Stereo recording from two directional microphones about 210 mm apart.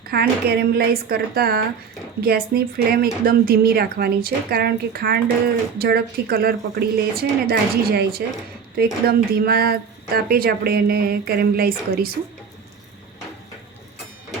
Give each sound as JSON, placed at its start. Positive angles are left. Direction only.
{"t": 0.1, "sound": "speech", "side_deg": -50}